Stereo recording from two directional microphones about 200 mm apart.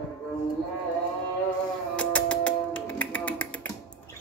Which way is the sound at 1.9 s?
5° left (ahead or behind).